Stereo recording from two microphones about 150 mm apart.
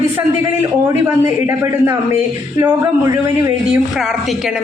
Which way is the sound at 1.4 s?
20° right (ahead or behind).